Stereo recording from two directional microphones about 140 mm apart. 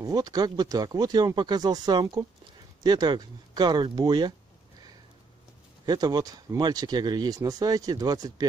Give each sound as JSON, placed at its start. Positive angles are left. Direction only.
{"t": 0.0, "sound": "speech", "side_deg": -25}
{"t": 5.9, "sound": "speech", "side_deg": -30}